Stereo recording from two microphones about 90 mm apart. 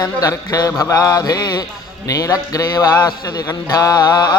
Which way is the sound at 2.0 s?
40° left (ahead or behind).